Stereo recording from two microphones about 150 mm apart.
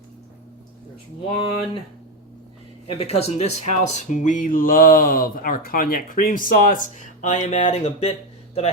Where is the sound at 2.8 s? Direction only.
45° left (ahead or behind).